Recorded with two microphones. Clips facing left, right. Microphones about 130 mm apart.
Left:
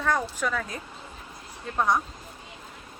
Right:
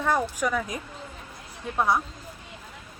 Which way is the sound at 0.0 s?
15° right (ahead or behind).